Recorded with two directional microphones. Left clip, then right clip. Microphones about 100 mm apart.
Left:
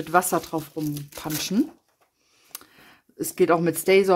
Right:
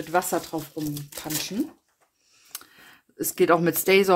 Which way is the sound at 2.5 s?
10° left (ahead or behind).